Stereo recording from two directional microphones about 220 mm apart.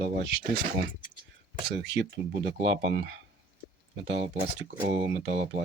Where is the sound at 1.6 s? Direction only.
55° right (ahead or behind).